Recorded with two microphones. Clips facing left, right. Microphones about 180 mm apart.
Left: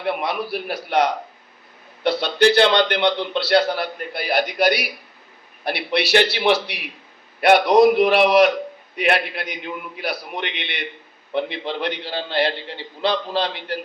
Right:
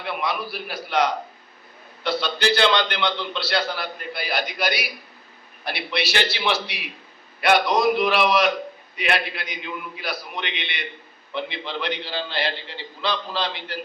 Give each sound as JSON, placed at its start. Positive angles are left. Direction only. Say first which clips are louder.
{"t": 0.0, "sound": "a man's voice", "louder": "left 4 dB", "side_deg": 55}